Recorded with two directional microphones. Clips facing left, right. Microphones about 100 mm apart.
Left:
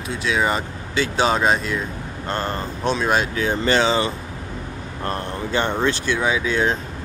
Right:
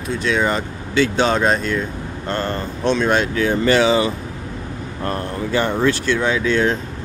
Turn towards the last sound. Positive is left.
turn(degrees=15)  # may be behind; listen again after turning